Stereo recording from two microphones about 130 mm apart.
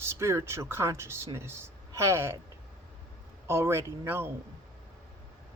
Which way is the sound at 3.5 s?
20° right (ahead or behind).